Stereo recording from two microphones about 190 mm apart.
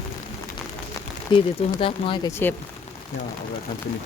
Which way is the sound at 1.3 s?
30° left (ahead or behind).